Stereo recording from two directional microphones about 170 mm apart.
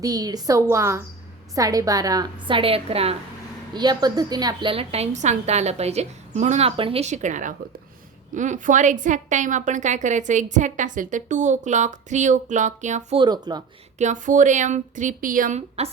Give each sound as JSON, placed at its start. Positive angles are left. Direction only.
{"t": 0.0, "sound": "a woman's voice", "side_deg": -20}
{"t": 3.8, "sound": "a woman's voice", "side_deg": -25}
{"t": 13.1, "sound": "a woman's voice", "side_deg": -25}
{"t": 14.0, "sound": "a woman's voice", "side_deg": -45}